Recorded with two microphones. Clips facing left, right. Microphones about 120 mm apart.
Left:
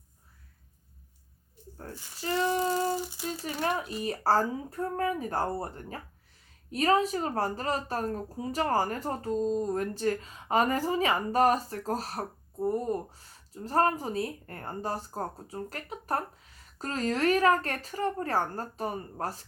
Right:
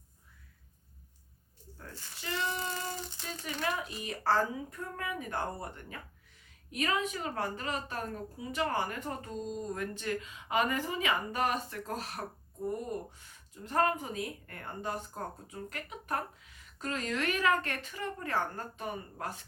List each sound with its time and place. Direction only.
2.2 s child singing: 35° left (ahead or behind)
3.4 s a woman's voice: 35° left (ahead or behind)